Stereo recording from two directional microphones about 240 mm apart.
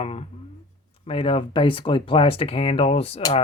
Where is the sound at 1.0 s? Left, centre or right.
Left.